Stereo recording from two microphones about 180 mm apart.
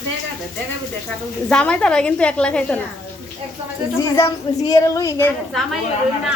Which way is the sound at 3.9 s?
15° left (ahead or behind).